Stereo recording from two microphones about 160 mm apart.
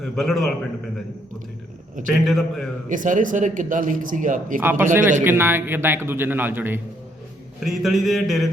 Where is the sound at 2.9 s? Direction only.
55° right (ahead or behind).